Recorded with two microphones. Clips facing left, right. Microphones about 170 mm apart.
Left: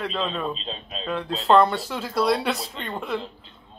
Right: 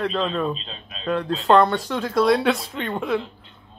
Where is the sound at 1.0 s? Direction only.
Centre (ahead or behind).